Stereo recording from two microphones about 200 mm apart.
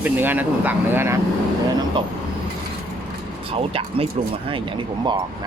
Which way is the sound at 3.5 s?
30° right (ahead or behind).